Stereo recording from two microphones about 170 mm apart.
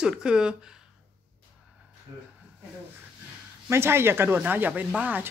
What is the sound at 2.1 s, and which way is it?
Speech, 15° right (ahead or behind).